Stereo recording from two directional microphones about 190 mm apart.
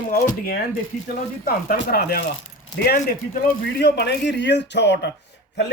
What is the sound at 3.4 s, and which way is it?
Speech, 60° left (ahead or behind).